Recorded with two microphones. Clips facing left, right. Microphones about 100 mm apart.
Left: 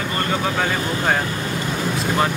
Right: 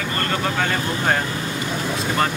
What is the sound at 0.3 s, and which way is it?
Speech, 10° left (ahead or behind).